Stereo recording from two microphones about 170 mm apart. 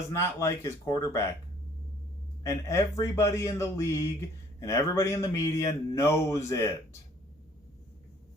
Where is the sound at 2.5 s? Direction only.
20° left (ahead or behind).